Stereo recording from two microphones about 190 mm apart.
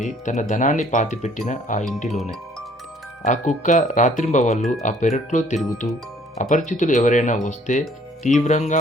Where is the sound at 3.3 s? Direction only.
40° left (ahead or behind).